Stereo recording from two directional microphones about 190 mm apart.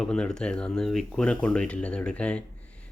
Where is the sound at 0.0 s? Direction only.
5° left (ahead or behind).